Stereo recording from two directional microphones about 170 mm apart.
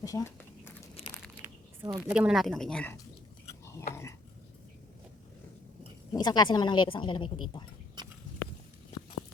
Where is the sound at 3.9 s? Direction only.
15° left (ahead or behind).